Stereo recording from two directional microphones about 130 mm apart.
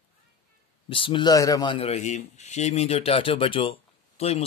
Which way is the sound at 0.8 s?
40° left (ahead or behind).